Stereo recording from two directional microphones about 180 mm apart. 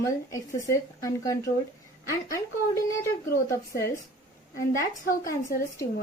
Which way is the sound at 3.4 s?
15° left (ahead or behind).